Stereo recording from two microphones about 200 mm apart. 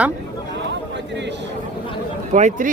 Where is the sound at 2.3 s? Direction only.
35° right (ahead or behind).